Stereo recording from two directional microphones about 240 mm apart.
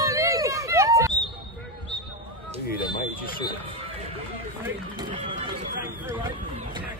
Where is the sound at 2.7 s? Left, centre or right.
Left.